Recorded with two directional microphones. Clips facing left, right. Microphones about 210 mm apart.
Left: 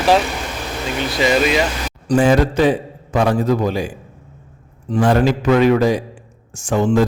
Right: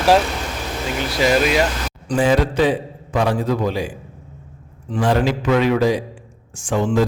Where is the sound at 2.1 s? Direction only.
45° left (ahead or behind).